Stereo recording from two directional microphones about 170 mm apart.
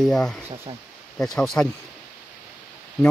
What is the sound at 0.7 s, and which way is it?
Speech, 25° right (ahead or behind).